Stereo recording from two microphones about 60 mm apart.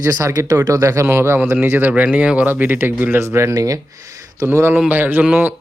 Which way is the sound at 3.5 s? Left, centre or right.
Right.